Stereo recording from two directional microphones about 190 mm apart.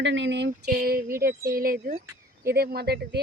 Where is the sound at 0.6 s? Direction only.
50° right (ahead or behind).